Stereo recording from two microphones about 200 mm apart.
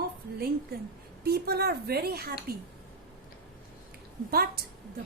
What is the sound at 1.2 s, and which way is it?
Speech, 50° right (ahead or behind).